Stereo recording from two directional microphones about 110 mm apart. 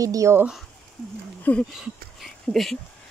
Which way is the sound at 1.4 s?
15° left (ahead or behind).